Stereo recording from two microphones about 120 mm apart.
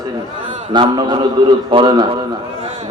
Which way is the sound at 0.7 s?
40° right (ahead or behind).